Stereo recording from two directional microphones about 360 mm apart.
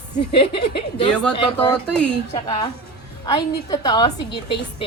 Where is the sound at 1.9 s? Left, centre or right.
Centre.